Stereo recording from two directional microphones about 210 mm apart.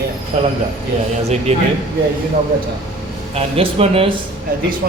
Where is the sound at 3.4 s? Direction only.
30° right (ahead or behind).